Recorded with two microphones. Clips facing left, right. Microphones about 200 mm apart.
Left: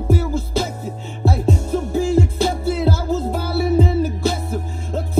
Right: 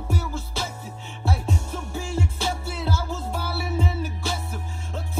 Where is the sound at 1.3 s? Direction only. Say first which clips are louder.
Left 9 dB; 40° left (ahead or behind).